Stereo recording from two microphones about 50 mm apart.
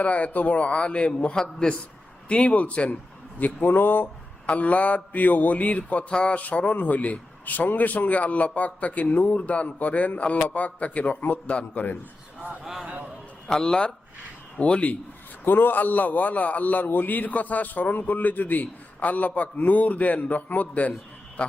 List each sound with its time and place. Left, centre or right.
0.0 s mantra: left
1.4 s a man's voice: centre; by 4.1 s left
4.4 s mantra: left
6.4 s a man's voice: left
10.3 s mantra: left
12.6 s a man's voice: centre
13.5 s a man's voice: centre
14.6 s mantra: left
15.4 s a man's voice: left